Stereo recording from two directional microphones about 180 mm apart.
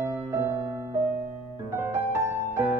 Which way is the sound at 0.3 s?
15° right (ahead or behind).